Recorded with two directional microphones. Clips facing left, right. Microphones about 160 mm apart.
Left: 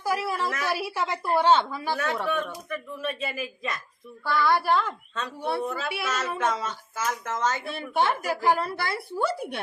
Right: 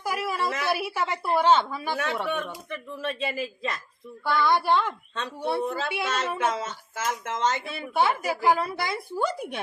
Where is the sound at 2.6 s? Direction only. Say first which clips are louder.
Even; 30° right (ahead or behind).